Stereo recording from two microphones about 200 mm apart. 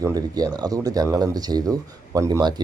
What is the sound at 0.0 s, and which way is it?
Speech, 20° right (ahead or behind).